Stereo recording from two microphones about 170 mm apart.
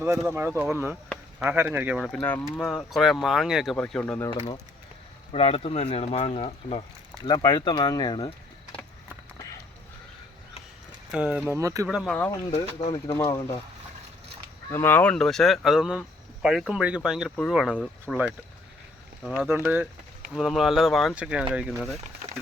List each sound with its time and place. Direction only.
0.2 s speech: 10° right (ahead or behind); by 4.3 s 5° left (ahead or behind)
5.3 s speech: 35° left (ahead or behind)
11.1 s speech: 5° right (ahead or behind)
11.5 s speech: 20° right (ahead or behind)
11.9 s speech: centre (ahead or behind)
12.5 s speech: 30° left (ahead or behind)
13.1 s speech: 15° left (ahead or behind)
14.7 s speech: 15° left (ahead or behind); by 18.3 s 10° right (ahead or behind)
19.2 s speech: 5° left (ahead or behind)
19.5 s speech: 10° right (ahead or behind)